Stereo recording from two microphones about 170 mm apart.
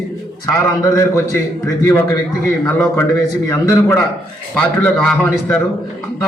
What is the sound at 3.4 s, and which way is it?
Speech, 15° left (ahead or behind).